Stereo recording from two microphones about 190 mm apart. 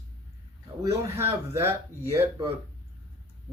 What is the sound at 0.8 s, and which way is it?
Speech, 15° right (ahead or behind).